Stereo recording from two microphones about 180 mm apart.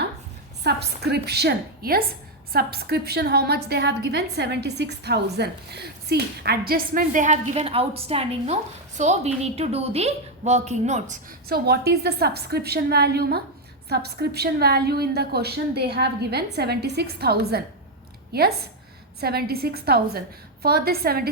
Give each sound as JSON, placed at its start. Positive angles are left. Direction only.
{"t": 0.6, "sound": "a woman's voice", "side_deg": -65}
{"t": 11.4, "sound": "a woman's voice", "side_deg": -60}